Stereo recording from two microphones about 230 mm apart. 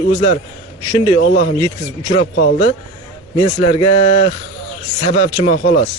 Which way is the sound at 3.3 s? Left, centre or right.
Left.